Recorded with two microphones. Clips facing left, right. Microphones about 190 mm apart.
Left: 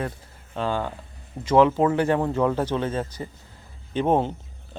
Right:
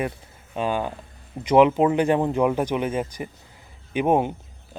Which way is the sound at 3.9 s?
10° right (ahead or behind).